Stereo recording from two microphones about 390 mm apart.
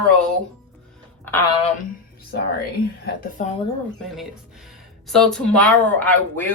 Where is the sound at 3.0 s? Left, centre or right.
Centre.